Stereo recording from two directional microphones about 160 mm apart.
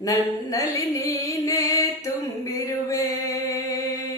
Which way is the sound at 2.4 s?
20° left (ahead or behind).